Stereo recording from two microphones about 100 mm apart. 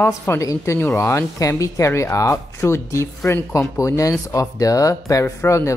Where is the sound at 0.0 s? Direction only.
25° left (ahead or behind).